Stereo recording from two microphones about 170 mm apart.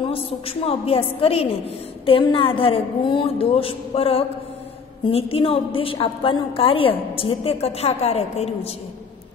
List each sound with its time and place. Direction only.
0.0 s a woman's voice: 35° left (ahead or behind)